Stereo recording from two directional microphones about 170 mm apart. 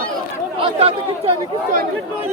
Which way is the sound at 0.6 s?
35° right (ahead or behind).